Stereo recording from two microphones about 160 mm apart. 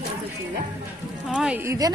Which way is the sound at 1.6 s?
20° right (ahead or behind).